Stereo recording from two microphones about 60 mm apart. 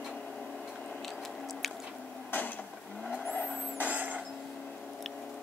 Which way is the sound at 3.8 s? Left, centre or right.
Right.